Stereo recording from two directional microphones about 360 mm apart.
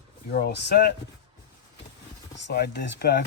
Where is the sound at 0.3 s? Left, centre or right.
Left.